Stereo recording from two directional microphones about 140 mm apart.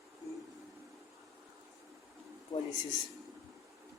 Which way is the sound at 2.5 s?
30° left (ahead or behind).